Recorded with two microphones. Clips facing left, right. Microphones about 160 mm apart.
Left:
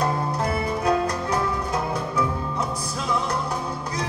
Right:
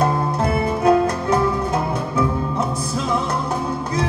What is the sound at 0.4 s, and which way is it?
Music, 25° right (ahead or behind).